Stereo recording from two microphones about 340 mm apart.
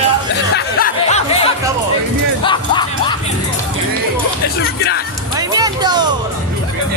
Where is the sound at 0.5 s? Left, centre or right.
Left.